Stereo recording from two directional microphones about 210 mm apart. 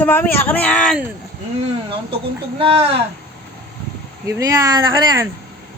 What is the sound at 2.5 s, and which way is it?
Speech, 25° right (ahead or behind).